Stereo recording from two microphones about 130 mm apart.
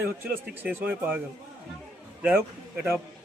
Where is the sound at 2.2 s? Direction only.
15° right (ahead or behind).